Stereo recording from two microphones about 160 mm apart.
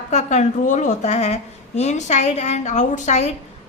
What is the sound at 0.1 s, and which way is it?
A woman's voice, 45° left (ahead or behind).